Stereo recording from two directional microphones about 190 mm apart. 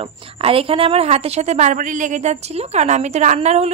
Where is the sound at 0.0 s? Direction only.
30° right (ahead or behind).